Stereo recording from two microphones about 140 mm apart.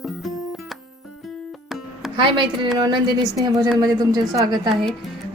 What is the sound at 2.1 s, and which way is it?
A woman's voice, 35° right (ahead or behind).